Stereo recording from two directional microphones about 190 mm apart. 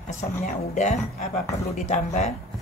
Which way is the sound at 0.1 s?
40° left (ahead or behind).